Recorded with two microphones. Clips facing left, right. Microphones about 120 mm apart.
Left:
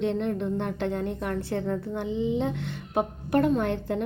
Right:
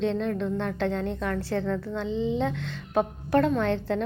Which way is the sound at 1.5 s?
65° right (ahead or behind).